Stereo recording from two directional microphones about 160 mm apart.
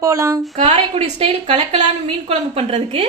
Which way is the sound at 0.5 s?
45° right (ahead or behind).